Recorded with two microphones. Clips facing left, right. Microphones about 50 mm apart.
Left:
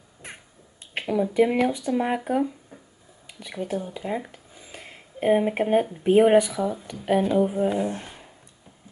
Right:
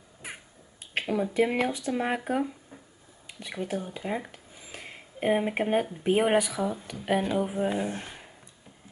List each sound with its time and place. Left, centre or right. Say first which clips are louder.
0.9 s speech: left 4 dB; centre
3.3 s a sound: left 2 dB; centre
3.9 s speech: left 3 dB; centre